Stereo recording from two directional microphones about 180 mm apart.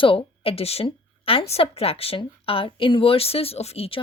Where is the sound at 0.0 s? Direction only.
30° left (ahead or behind).